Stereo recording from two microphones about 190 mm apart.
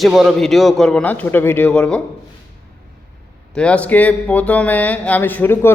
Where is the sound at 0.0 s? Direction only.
Centre (ahead or behind).